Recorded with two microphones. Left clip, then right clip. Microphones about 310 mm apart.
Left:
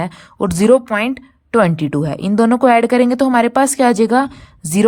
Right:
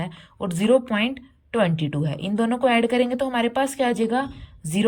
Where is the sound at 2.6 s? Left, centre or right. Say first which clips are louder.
Left 7 dB; centre.